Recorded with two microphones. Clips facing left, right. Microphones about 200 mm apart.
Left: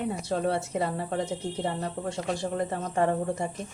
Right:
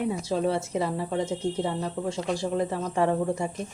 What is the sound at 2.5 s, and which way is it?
Speech, 50° left (ahead or behind).